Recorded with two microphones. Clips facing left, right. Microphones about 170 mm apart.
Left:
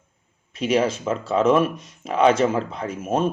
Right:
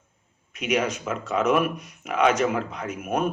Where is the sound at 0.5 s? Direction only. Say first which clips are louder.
Left 4 dB; 30° left (ahead or behind).